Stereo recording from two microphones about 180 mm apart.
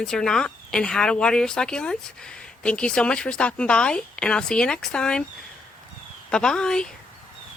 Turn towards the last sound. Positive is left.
turn(degrees=5)  # may be behind; listen again after turning